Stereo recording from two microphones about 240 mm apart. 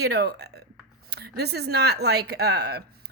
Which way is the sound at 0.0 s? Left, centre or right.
Right.